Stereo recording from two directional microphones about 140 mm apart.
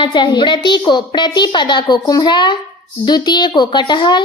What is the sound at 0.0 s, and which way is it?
A woman's voice, 35° left (ahead or behind).